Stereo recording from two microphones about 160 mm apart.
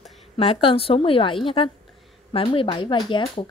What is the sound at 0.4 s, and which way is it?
Speech, 35° left (ahead or behind).